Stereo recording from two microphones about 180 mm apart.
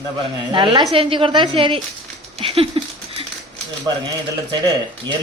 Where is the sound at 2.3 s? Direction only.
35° right (ahead or behind).